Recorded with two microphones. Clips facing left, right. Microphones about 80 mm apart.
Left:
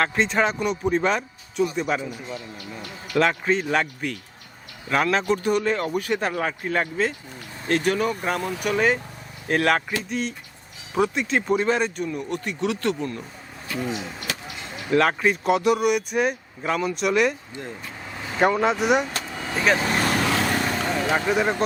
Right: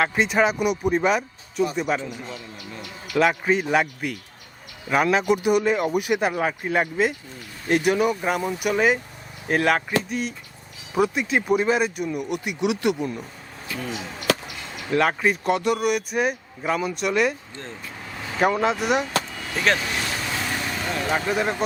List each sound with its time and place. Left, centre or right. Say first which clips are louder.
0.0 s speech: right 1 dB; centre
3.1 s speech: right 1 dB; centre
14.8 s speech: left 1 dB; centre
17.5 s vehicle: left 2 dB; centre
18.4 s speech: left 1 dB; centre
19.0 s vehicle: right 3 dB; left
19.8 s vehicle: left 5 dB; left
20.1 s vehicle: left 6 dB; left
20.9 s speech: even; centre